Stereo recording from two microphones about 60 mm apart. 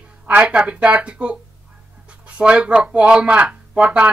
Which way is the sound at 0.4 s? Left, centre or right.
Centre.